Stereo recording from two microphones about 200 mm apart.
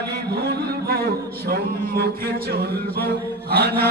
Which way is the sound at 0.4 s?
50° right (ahead or behind).